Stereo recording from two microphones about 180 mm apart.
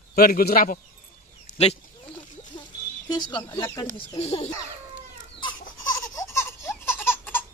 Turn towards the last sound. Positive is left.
turn(degrees=10)  # may be behind; listen again after turning